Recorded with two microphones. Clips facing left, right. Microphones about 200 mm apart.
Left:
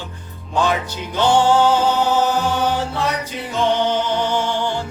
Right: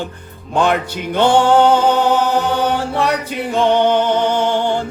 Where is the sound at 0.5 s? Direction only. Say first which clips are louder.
Right 4 dB; 60° right (ahead or behind).